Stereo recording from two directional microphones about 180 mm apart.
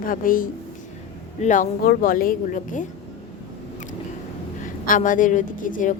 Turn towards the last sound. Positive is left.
turn(degrees=45)  # may be behind; listen again after turning